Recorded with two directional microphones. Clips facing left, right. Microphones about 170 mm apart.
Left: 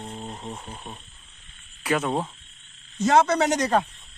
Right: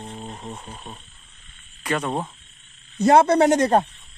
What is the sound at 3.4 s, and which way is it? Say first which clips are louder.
Speech: right 6 dB; 55° right (ahead or behind).